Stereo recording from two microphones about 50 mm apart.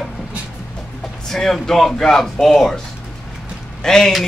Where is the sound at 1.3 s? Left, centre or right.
Centre.